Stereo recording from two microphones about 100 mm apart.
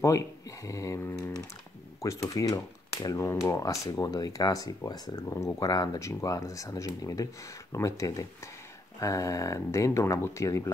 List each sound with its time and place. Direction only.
0.7 s mantra: 35° left (ahead or behind)
2.0 s speech: 35° left (ahead or behind)